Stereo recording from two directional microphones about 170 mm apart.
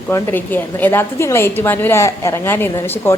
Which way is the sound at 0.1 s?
10° left (ahead or behind).